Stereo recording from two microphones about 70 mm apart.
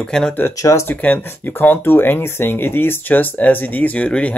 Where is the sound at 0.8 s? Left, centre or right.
Left.